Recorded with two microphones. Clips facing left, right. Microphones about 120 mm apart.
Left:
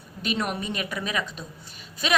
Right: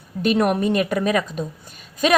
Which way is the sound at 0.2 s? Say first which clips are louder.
Right 10 dB; 55° right (ahead or behind).